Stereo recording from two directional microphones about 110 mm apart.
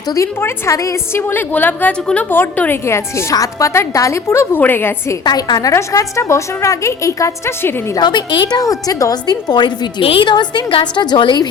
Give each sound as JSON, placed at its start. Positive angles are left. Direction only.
{"t": 0.1, "sound": "a woman's voice", "side_deg": 25}
{"t": 5.2, "sound": "a woman's voice", "side_deg": 40}
{"t": 7.9, "sound": "a woman's voice", "side_deg": 40}